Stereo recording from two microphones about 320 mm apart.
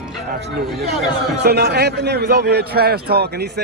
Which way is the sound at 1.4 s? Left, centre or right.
Right.